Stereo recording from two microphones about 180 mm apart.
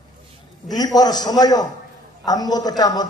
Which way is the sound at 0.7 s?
20° left (ahead or behind).